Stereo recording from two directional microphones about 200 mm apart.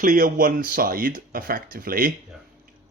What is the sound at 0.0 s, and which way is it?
Speech, 40° right (ahead or behind).